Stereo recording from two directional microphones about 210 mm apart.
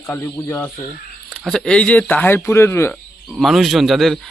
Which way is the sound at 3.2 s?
Centre (ahead or behind).